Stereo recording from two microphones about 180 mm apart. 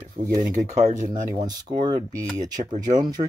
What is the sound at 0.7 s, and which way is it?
Speech, 40° right (ahead or behind).